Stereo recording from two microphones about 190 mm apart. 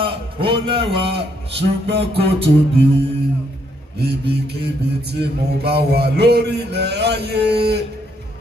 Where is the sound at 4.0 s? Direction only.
60° right (ahead or behind).